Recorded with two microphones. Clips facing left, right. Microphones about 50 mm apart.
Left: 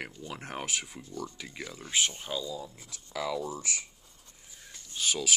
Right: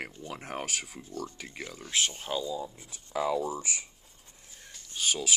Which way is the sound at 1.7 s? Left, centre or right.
Centre.